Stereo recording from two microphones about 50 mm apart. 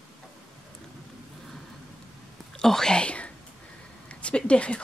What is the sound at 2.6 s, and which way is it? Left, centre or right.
A woman's voice, centre.